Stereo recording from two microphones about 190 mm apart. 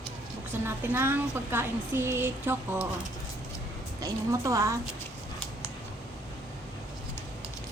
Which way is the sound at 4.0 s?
15° right (ahead or behind).